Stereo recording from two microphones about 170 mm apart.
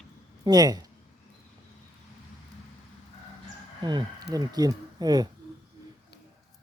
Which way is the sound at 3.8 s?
25° right (ahead or behind).